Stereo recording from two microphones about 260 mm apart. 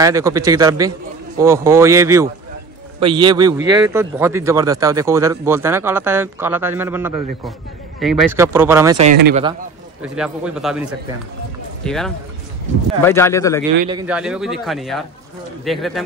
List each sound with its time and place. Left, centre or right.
0.0 s a man's voice: centre
10.0 s speech: centre
14.0 s speech: centre